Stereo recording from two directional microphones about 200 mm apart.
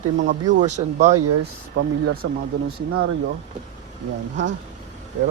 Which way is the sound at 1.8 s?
70° right (ahead or behind).